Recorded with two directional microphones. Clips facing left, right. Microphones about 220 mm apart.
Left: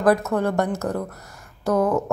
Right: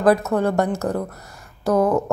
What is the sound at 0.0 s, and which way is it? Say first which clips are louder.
A woman's voice: right 2 dB; 30° right (ahead or behind).